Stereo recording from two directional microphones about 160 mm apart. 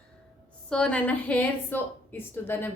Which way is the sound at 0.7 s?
5° left (ahead or behind).